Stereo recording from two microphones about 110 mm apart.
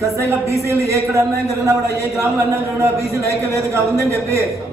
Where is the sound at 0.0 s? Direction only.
25° right (ahead or behind).